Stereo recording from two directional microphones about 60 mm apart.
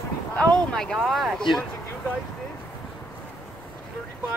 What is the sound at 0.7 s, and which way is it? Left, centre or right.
Speech, centre.